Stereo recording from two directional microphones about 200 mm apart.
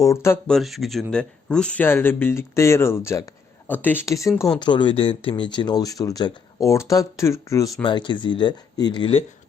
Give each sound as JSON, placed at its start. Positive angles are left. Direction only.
{"t": 0.0, "sound": "speech", "side_deg": 15}
{"t": 0.5, "sound": "speech", "side_deg": 0}